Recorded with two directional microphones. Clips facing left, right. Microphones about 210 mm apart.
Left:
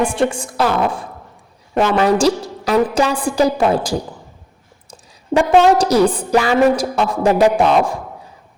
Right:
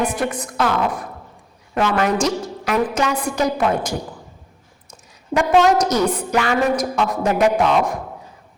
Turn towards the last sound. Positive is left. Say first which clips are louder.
# left 3 dB
turn(degrees=30)  # may be behind; listen again after turning